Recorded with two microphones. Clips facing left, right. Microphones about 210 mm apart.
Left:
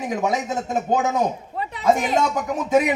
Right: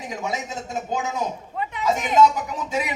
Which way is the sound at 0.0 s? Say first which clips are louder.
Left 6 dB; 55° left (ahead or behind).